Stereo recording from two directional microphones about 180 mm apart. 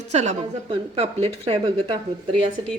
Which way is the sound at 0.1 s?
40° right (ahead or behind).